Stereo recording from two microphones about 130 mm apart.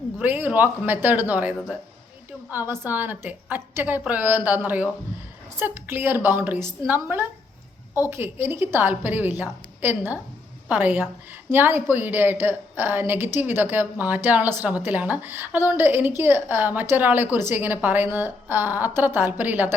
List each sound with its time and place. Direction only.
0.2 s a woman's voice: 15° right (ahead or behind)